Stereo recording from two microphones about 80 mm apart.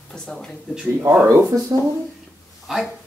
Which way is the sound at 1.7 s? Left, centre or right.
Right.